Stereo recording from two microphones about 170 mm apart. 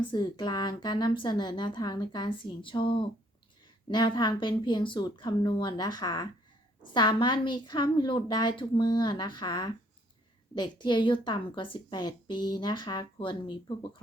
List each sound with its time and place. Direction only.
0.0 s a woman's voice: 25° left (ahead or behind)